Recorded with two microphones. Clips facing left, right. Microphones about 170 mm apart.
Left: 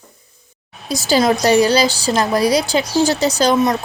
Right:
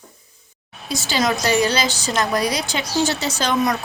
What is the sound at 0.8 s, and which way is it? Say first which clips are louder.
A woman's voice: left 6 dB; 40° left (ahead or behind).